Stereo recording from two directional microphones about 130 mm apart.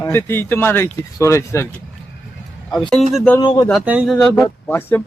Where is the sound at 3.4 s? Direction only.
35° left (ahead or behind).